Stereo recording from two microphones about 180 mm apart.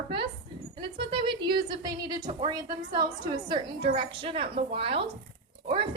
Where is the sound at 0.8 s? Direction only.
30° right (ahead or behind).